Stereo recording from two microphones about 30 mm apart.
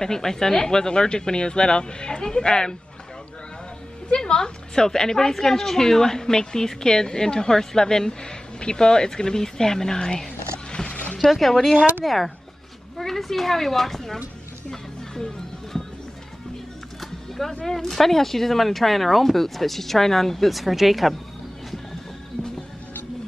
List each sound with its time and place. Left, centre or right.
0.0 s a woman's voice: centre
4.2 s a woman's voice: left
10.7 s music: left
11.2 s speech: centre
14.7 s music: centre
17.0 s music: centre
17.6 s speech: centre